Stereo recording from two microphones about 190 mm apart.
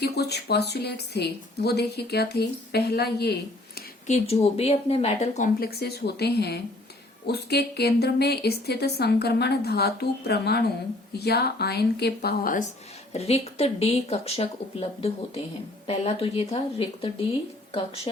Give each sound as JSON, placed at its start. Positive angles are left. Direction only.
{"t": 0.0, "sound": "a woman's voice", "side_deg": 60}
{"t": 4.0, "sound": "speech", "side_deg": 35}
{"t": 5.5, "sound": "a woman's voice", "side_deg": 55}
{"t": 13.1, "sound": "speech", "side_deg": 35}